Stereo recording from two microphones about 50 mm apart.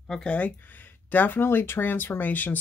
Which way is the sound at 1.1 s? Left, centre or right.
Left.